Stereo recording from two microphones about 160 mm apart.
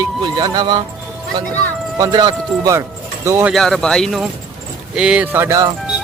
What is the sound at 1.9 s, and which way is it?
Speech, 25° right (ahead or behind).